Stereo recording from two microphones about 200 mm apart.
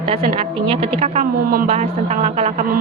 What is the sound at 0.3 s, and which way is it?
A woman's voice, 30° right (ahead or behind).